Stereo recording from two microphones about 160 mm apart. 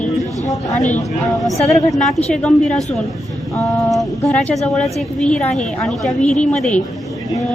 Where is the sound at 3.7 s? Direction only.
20° left (ahead or behind).